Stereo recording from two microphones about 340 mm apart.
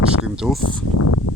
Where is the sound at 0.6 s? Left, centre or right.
Left.